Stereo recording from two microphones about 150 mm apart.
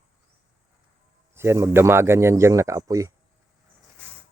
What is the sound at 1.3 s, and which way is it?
A man's voice, 15° right (ahead or behind).